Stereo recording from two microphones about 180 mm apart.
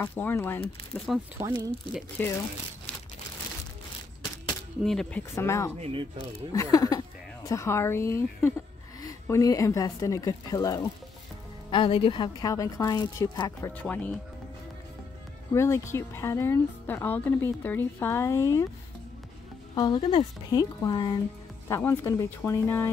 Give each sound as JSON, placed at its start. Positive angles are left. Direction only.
{"t": 0.0, "sound": "speech", "side_deg": 10}
{"t": 0.9, "sound": "speech", "side_deg": 0}
{"t": 4.8, "sound": "speech", "side_deg": 5}
{"t": 5.3, "sound": "speech", "side_deg": 15}
{"t": 5.8, "sound": "speech", "side_deg": -30}
{"t": 6.5, "sound": "a woman's voice", "side_deg": 20}
{"t": 15.5, "sound": "speech", "side_deg": 15}
{"t": 19.7, "sound": "a woman's voice", "side_deg": 20}